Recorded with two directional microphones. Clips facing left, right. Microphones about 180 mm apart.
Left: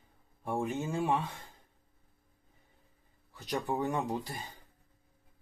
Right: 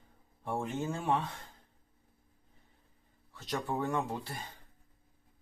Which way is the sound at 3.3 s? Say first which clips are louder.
Left 2 dB; 15° left (ahead or behind).